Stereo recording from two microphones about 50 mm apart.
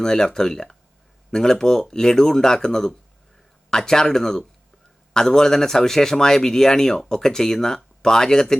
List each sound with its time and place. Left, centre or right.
0.0 s speech: centre